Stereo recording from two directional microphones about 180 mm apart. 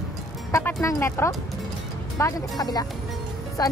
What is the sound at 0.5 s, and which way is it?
Speech, 15° left (ahead or behind).